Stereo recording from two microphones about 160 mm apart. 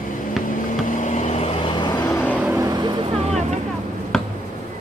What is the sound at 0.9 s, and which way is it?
Vehicle, 50° left (ahead or behind).